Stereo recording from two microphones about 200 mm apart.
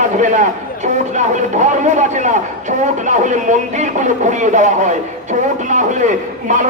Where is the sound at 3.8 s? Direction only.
35° right (ahead or behind).